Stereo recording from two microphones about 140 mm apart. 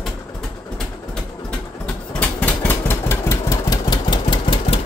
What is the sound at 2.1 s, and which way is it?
Engine, 10° left (ahead or behind).